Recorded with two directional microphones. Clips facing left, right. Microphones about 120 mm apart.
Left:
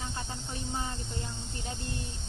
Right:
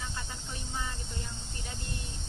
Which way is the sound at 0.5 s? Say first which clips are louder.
Left 3 dB; 30° left (ahead or behind).